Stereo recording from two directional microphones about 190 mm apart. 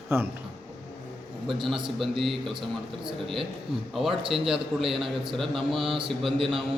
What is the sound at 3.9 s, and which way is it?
Speech, centre (ahead or behind).